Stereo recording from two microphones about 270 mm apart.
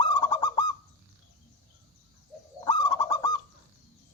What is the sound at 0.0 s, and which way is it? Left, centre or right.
Bird, centre.